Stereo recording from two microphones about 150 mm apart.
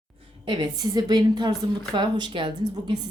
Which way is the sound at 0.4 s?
30° right (ahead or behind).